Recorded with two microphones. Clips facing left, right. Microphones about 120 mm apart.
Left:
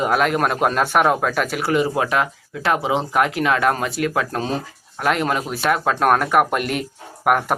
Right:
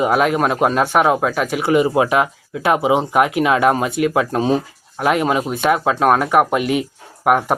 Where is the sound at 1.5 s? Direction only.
15° right (ahead or behind).